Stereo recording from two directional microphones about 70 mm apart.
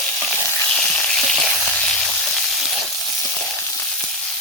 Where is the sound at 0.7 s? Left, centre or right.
Centre.